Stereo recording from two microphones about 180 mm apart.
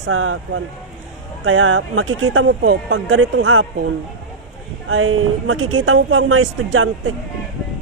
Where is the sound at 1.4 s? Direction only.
90° right.